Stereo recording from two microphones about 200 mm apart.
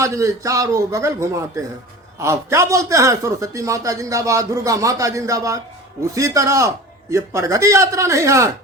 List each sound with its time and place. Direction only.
0.0 s a man's voice: 15° right (ahead or behind)